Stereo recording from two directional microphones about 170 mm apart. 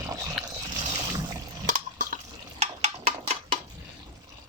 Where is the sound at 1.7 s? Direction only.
50° right (ahead or behind).